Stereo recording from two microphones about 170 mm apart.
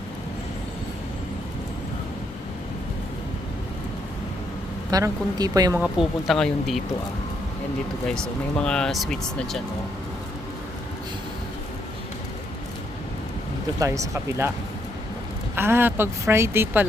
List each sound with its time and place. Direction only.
4.9 s speech: 20° right (ahead or behind)
5.7 s speech: 5° right (ahead or behind)
8.0 s speech: 5° left (ahead or behind)
13.7 s a woman's voice: 20° right (ahead or behind)
15.5 s a woman's voice: 15° right (ahead or behind)